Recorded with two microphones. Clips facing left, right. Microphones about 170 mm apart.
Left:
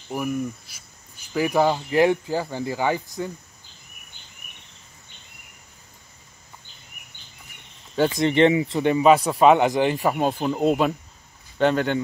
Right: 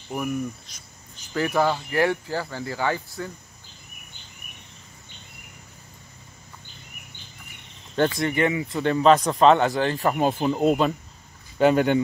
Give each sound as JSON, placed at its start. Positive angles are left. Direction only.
{"t": 0.1, "sound": "speech", "side_deg": 5}
{"t": 8.1, "sound": "speech", "side_deg": 20}
{"t": 8.9, "sound": "speech", "side_deg": 10}
{"t": 10.1, "sound": "speech", "side_deg": 0}
{"t": 11.5, "sound": "speech", "side_deg": -10}